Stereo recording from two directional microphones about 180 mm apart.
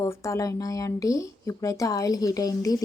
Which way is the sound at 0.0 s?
15° left (ahead or behind).